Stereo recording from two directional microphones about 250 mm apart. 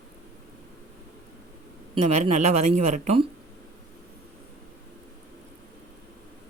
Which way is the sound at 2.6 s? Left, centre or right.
Right.